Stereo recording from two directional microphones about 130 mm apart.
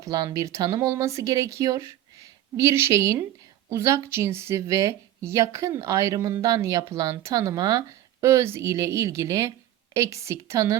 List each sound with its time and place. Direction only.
0.0 s a woman's voice: 25° right (ahead or behind)